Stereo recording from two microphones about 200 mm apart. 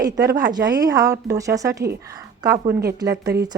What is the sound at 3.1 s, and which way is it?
Speech, 55° right (ahead or behind).